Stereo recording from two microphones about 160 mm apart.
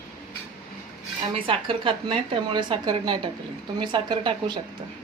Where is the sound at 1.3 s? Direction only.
35° right (ahead or behind).